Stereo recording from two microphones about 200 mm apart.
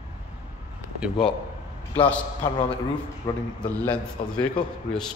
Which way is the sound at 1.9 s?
10° left (ahead or behind).